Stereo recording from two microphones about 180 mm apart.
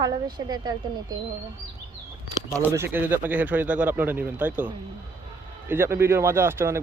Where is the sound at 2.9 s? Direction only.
10° right (ahead or behind).